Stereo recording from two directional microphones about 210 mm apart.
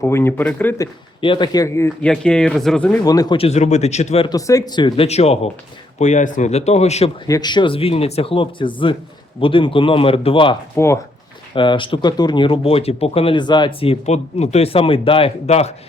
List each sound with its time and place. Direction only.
0.0 s speech: 10° left (ahead or behind)
1.2 s speech: 25° left (ahead or behind); by 3.0 s 5° left (ahead or behind)
3.0 s speech: 15° left (ahead or behind)
7.3 s speech: 20° left (ahead or behind)
10.8 s speech: 15° left (ahead or behind)
11.5 s speech: 25° left (ahead or behind)